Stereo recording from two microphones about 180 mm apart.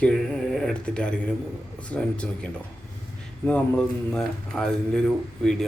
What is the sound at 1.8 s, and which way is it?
Speech, 5° left (ahead or behind).